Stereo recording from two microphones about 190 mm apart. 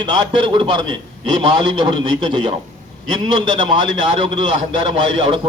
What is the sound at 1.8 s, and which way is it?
A man's voice, 25° right (ahead or behind).